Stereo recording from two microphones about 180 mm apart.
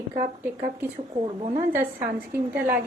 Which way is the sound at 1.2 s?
30° right (ahead or behind).